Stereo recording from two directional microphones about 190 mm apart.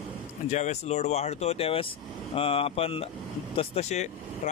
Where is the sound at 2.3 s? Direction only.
30° left (ahead or behind).